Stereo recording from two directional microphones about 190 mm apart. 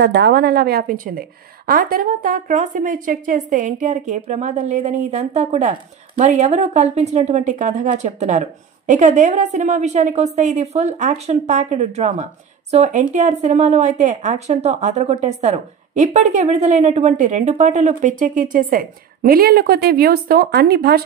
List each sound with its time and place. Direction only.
0.0 s a woman's voice: 60° right (ahead or behind)